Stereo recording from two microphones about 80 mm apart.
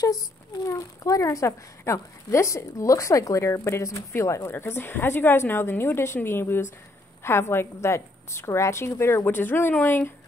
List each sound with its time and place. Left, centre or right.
0.7 s a child's voice: left